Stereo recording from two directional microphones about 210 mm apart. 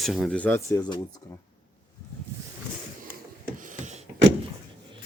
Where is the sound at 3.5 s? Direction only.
35° right (ahead or behind).